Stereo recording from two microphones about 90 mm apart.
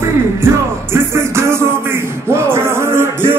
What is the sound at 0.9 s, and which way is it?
Music, 30° right (ahead or behind).